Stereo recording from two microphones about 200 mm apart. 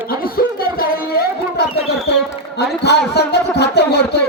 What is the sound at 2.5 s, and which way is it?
Speech, 55° left (ahead or behind).